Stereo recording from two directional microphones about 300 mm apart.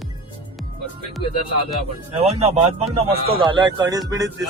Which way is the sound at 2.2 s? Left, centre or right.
Centre.